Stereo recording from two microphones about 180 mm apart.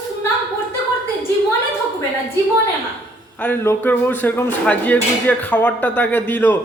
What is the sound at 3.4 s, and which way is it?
Speech, 10° left (ahead or behind).